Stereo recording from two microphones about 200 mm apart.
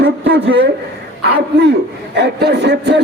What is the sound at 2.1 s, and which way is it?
Speech, 55° right (ahead or behind).